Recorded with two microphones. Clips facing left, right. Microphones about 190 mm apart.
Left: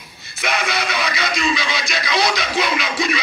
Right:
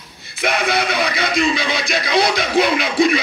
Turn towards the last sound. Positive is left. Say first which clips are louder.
# right 6 dB
turn(degrees=-55)  # may be behind; listen again after turning